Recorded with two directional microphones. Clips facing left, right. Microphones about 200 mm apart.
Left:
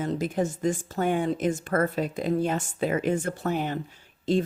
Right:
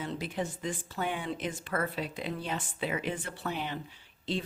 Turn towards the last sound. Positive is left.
turn(degrees=45)  # may be behind; listen again after turning